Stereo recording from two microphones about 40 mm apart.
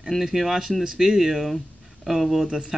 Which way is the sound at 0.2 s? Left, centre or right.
Centre.